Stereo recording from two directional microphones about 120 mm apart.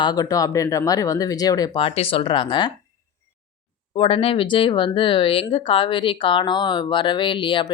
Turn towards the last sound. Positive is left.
turn(degrees=45)  # may be behind; listen again after turning